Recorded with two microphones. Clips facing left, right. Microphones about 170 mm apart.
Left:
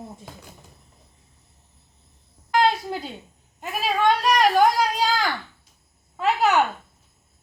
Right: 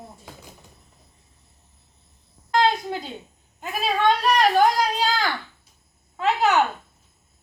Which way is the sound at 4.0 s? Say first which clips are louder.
Even; 10° left (ahead or behind).